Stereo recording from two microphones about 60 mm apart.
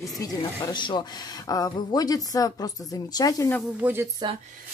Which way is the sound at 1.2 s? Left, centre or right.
Left.